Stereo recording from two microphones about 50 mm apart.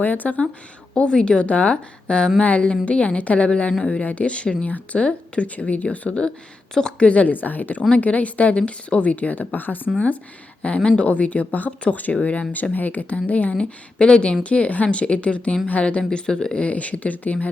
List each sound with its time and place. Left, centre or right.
0.0 s speech: left
0.9 s speech: left
6.1 s a woman's voice: centre
7.1 s speech: left
10.8 s speech: left